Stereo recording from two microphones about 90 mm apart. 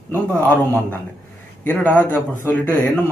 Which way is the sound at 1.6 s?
20° left (ahead or behind).